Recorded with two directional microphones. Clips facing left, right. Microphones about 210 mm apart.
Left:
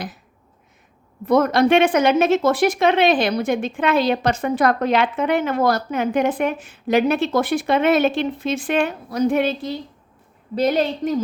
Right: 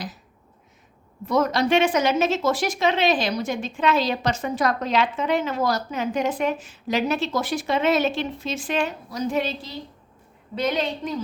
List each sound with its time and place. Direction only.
1.2 s a woman's voice: 55° left (ahead or behind)
10.5 s a woman's voice: 40° left (ahead or behind)